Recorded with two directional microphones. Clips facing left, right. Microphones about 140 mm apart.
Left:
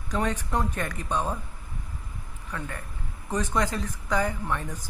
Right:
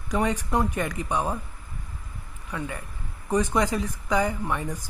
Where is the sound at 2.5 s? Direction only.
10° right (ahead or behind).